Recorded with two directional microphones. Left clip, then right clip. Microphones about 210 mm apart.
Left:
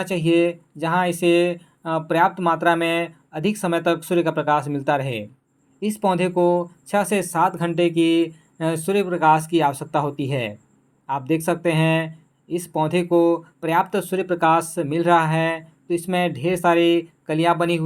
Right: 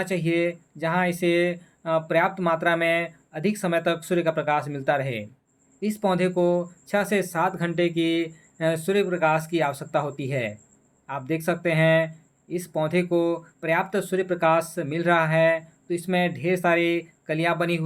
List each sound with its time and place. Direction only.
0.0 s speech: 15° left (ahead or behind)